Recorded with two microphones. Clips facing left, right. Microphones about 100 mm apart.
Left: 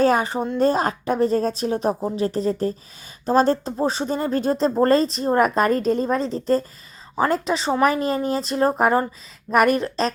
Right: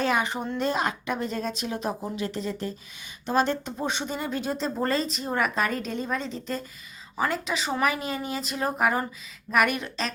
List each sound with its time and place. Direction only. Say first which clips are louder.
0.0 s speech: left 7 dB; 40° left (ahead or behind)